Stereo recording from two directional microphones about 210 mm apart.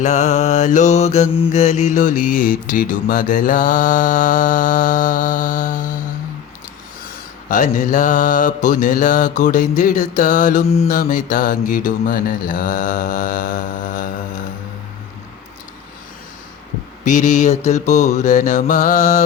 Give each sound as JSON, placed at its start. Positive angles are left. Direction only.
{"t": 0.0, "sound": "mantra", "side_deg": 35}
{"t": 7.0, "sound": "mantra", "side_deg": 40}
{"t": 17.0, "sound": "mantra", "side_deg": 35}